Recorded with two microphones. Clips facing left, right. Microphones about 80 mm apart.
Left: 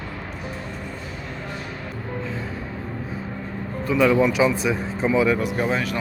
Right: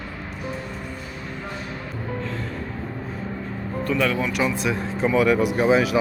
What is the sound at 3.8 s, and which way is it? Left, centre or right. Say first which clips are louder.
Speech: left 5 dB; centre.